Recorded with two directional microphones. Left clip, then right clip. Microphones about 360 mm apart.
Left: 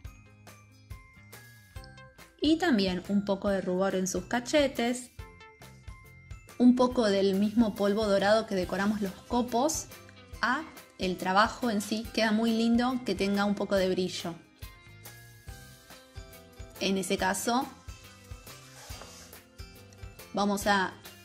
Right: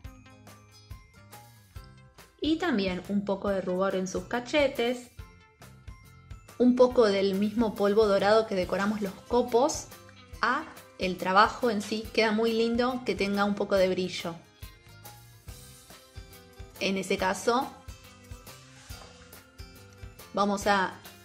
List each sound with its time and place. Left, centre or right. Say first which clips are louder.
2.4 s a woman's voice: left 2 dB; left
6.6 s speech: right 4 dB; centre
16.7 s speech: right 1 dB; centre
20.3 s speech: right 2 dB; centre